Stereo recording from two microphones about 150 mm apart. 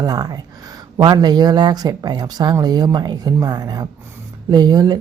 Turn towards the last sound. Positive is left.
turn(degrees=-25)  # may be behind; listen again after turning